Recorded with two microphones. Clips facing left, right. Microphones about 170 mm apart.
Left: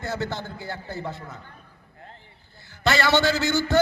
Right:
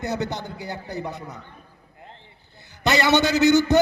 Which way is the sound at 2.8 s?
20° right (ahead or behind).